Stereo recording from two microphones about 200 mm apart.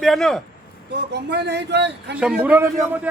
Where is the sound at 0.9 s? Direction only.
55° right (ahead or behind).